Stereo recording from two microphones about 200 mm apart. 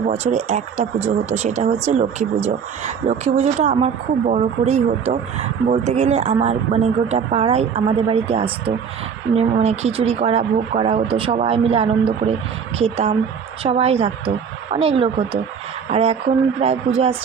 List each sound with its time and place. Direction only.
0.0 s speech: 35° right (ahead or behind)